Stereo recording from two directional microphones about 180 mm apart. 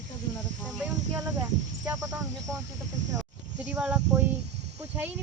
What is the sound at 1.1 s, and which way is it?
Speech, 15° right (ahead or behind).